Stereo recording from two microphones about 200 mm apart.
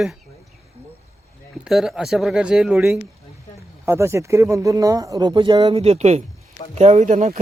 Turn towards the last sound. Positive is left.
turn(degrees=-35)  # may be behind; listen again after turning